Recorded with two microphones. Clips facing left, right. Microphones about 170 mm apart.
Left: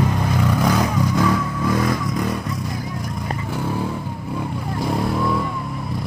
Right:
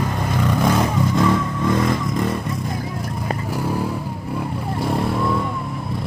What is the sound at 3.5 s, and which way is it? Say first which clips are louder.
Vehicle: right 1 dB; 5° right (ahead or behind).